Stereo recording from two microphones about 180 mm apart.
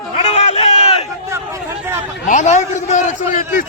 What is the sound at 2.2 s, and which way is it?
A man's voice, 45° left (ahead or behind).